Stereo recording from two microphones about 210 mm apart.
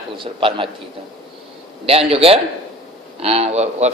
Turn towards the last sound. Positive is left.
turn(degrees=-30)  # may be behind; listen again after turning